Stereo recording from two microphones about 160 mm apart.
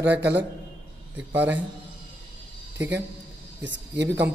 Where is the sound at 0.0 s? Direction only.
90° right.